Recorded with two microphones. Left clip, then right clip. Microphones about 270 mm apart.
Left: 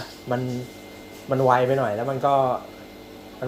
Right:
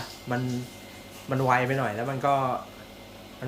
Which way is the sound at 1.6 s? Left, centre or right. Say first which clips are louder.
Left 6 dB; centre.